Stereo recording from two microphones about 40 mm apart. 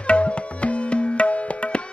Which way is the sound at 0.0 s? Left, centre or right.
Left.